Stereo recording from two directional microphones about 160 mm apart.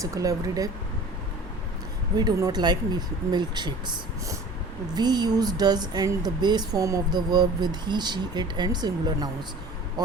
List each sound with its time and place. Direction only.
0.0 s speech: 20° right (ahead or behind)
2.1 s speech: 25° right (ahead or behind)
4.9 s speech: 25° right (ahead or behind)